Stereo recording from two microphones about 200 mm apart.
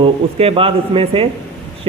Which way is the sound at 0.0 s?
30° right (ahead or behind).